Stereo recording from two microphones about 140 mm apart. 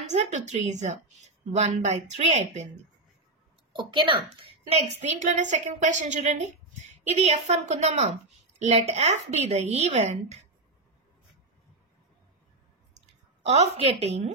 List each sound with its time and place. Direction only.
0.1 s a woman's voice: 55° right (ahead or behind)
3.7 s a woman's voice: 35° right (ahead or behind); by 10.4 s 50° right (ahead or behind)
13.7 s a woman's voice: 50° right (ahead or behind)